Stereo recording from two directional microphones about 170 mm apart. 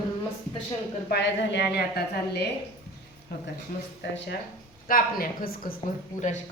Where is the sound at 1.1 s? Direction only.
85° left.